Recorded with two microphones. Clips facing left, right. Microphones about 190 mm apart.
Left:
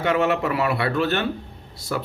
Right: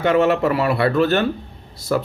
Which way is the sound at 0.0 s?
35° right (ahead or behind).